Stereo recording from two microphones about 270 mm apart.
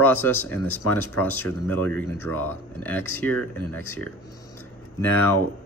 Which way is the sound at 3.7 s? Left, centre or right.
Left.